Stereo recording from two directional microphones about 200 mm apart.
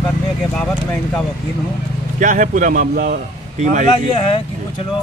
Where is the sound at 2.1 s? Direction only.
40° right (ahead or behind).